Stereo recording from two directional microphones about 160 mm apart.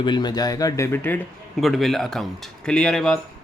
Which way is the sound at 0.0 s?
25° left (ahead or behind).